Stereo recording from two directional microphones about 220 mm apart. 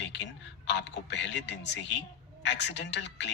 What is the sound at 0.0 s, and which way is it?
A man's voice, 55° left (ahead or behind).